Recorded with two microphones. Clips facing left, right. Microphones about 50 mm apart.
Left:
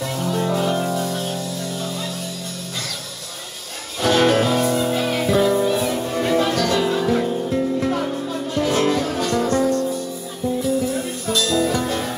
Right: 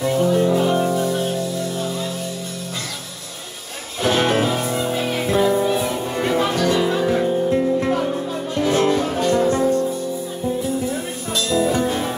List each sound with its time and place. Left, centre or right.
0.4 s music: centre
4.0 s music: centre
11.3 s music: centre